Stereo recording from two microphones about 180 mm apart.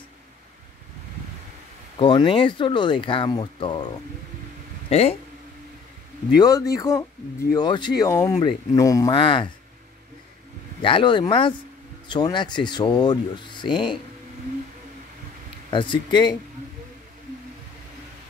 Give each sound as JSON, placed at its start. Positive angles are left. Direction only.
{"t": 2.0, "sound": "speech", "side_deg": 30}
{"t": 4.8, "sound": "speech", "side_deg": 35}
{"t": 6.3, "sound": "speech", "side_deg": 20}
{"t": 10.8, "sound": "speech", "side_deg": 30}
{"t": 15.7, "sound": "speech", "side_deg": 25}